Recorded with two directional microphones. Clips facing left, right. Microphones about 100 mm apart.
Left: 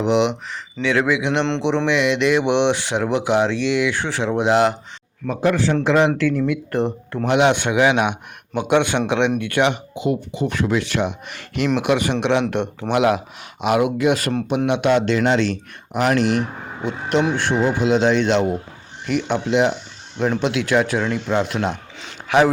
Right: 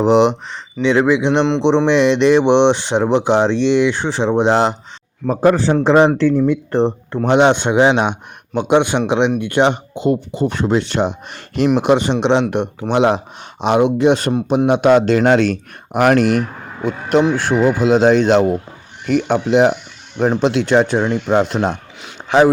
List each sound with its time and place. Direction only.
0.0 s speech: 35° right (ahead or behind); by 9.3 s 20° right (ahead or behind)
9.6 s speech: 35° right (ahead or behind)
14.7 s speech: 40° right (ahead or behind)
22.3 s a man's voice: 20° right (ahead or behind)